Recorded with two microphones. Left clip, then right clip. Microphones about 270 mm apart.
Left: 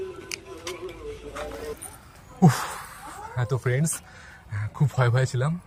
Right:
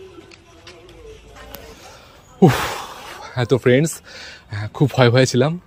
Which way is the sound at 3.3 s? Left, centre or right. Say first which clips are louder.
Right 13 dB; right.